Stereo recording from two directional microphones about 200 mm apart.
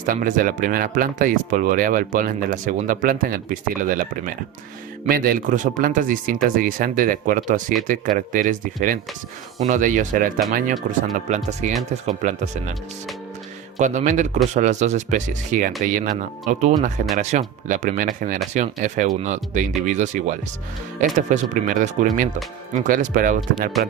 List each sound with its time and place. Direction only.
0.0 s speech: 40° right (ahead or behind)
13.7 s speech: 40° right (ahead or behind)